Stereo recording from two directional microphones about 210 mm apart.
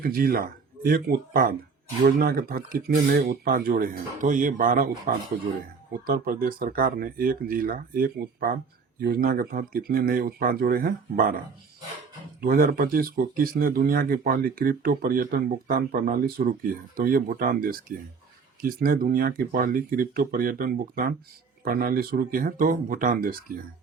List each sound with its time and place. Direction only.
0.0 s speech: 45° right (ahead or behind)
12.4 s speech: 45° right (ahead or behind)